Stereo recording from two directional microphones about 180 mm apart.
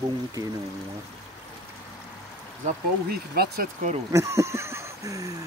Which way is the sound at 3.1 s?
60° right (ahead or behind).